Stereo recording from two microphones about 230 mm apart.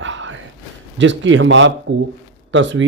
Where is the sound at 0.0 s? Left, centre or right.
Right.